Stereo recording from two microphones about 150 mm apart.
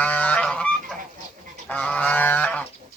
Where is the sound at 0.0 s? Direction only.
10° left (ahead or behind).